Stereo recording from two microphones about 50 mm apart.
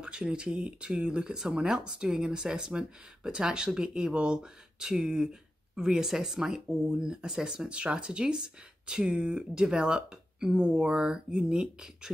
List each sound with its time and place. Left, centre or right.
0.0 s speech: centre